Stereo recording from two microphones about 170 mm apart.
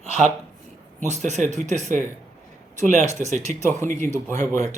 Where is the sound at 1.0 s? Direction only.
45° right (ahead or behind).